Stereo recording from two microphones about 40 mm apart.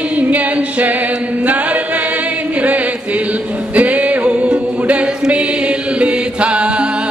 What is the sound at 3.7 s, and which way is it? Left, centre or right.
Music, right.